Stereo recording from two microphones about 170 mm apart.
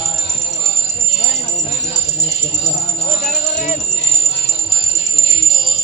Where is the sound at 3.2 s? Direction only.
45° left (ahead or behind).